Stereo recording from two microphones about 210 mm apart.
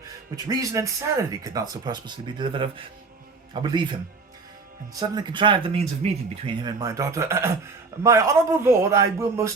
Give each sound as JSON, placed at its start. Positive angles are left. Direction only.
{"t": 0.4, "sound": "speech", "side_deg": -15}
{"t": 4.9, "sound": "a man's voice", "side_deg": -20}